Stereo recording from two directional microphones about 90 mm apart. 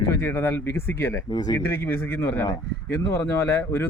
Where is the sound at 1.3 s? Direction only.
45° left (ahead or behind).